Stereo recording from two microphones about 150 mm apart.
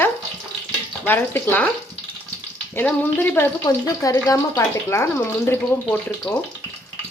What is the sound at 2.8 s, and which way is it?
Speech, 15° left (ahead or behind).